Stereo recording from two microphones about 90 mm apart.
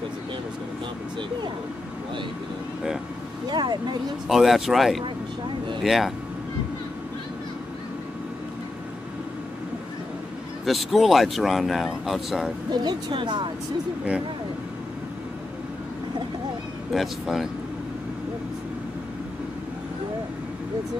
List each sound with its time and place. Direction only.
3.4 s speech: 55° right (ahead or behind)
4.3 s speech: 5° right (ahead or behind)
10.6 s speech: centre (ahead or behind)
12.7 s speech: 55° right (ahead or behind)
16.9 s speech: centre (ahead or behind)